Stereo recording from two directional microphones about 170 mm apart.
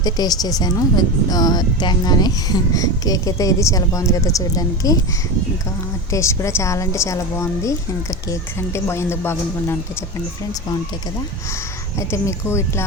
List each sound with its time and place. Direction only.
0.0 s speech: 20° left (ahead or behind)
6.1 s a woman's voice: 15° left (ahead or behind)
11.9 s a woman's voice: 15° left (ahead or behind)